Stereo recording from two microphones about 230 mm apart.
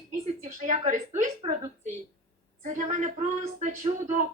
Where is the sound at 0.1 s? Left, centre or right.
Right.